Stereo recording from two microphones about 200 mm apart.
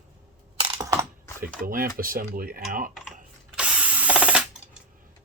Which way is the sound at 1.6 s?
45° right (ahead or behind).